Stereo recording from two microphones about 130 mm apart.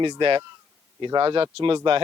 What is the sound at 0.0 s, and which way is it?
Speech, 40° right (ahead or behind).